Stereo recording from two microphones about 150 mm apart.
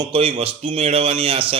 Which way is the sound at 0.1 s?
35° right (ahead or behind).